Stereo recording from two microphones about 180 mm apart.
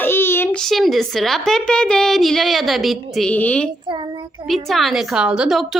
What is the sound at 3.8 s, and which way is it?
Child singing, 25° right (ahead or behind).